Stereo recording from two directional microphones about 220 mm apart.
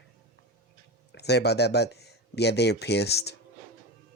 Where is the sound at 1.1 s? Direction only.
50° left (ahead or behind).